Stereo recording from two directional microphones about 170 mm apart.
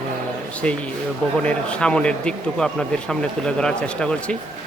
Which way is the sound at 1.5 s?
5° left (ahead or behind).